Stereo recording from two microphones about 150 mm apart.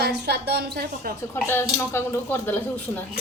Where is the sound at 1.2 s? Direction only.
15° left (ahead or behind).